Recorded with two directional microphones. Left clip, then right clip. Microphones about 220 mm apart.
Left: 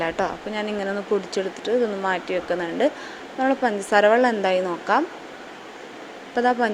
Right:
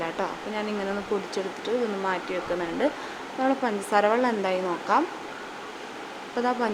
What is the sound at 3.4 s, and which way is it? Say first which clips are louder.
A woman's voice: left 4 dB; 15° left (ahead or behind).